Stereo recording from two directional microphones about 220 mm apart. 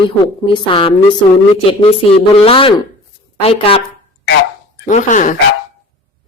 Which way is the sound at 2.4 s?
25° left (ahead or behind).